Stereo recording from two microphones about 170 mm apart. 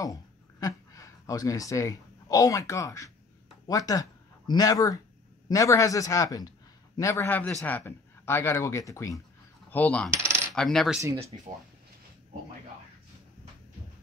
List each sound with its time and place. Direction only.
0.0 s a man's voice: 20° left (ahead or behind)
9.7 s coin: 10° left (ahead or behind)
10.1 s coin: 15° right (ahead or behind)
10.5 s coin: 5° left (ahead or behind)
11.3 s speech: 35° right (ahead or behind)